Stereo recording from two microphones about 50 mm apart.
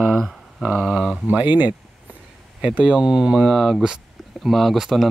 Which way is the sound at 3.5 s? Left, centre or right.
Centre.